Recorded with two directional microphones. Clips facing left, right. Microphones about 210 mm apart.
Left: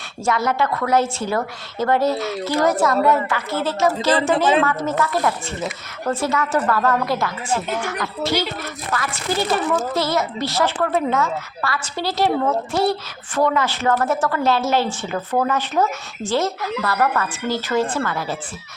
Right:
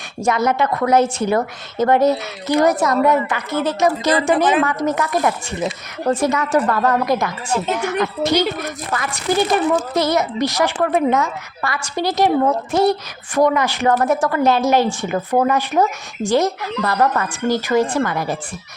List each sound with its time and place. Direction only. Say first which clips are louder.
0.3 s a woman's voice: right 3 dB; 20° right (ahead or behind)